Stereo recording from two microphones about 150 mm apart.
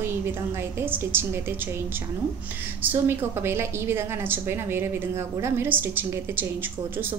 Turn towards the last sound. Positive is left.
turn(degrees=-15)  # may be behind; listen again after turning